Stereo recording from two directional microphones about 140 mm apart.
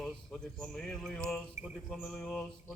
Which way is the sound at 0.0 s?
Centre (ahead or behind).